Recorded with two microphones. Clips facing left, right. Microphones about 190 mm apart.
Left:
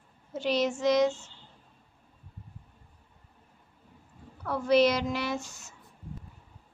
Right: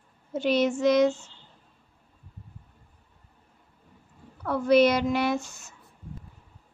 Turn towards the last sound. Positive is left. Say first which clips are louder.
# right 5 dB
turn(degrees=-55)  # may be behind; listen again after turning